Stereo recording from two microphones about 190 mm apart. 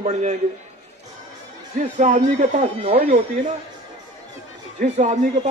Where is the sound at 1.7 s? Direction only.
45° right (ahead or behind).